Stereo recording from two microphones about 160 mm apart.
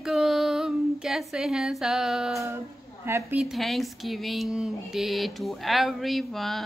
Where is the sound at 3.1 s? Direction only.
15° right (ahead or behind).